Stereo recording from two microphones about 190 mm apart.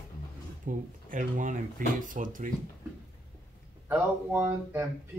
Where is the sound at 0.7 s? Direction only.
45° right (ahead or behind).